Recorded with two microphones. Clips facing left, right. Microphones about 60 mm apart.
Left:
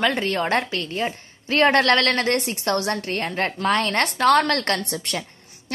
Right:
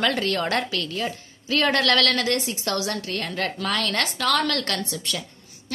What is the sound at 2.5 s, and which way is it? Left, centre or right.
Speech, left.